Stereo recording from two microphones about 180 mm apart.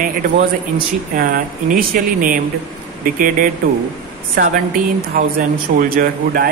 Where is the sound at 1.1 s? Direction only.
50° right (ahead or behind).